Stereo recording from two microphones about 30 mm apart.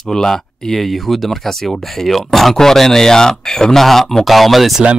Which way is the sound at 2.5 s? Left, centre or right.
Centre.